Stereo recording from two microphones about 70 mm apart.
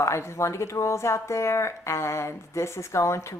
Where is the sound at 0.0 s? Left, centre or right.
Left.